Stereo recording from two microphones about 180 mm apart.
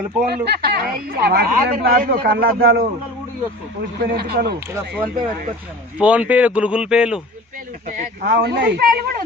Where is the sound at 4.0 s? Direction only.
60° right (ahead or behind).